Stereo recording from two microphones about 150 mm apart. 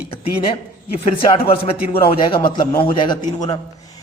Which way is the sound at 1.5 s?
35° left (ahead or behind).